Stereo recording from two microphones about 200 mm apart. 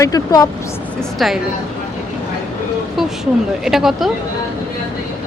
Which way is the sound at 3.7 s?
Centre (ahead or behind).